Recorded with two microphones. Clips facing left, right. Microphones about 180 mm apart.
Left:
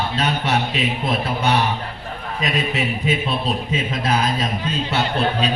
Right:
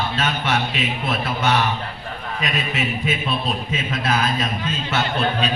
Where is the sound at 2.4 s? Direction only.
35° left (ahead or behind).